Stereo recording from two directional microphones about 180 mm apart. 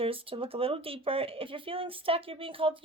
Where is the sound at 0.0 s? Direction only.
30° right (ahead or behind).